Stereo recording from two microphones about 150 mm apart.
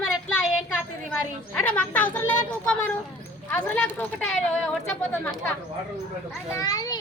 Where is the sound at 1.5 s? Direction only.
10° left (ahead or behind).